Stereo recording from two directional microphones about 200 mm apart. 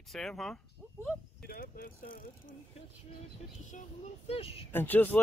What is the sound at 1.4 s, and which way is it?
Speech, 45° left (ahead or behind).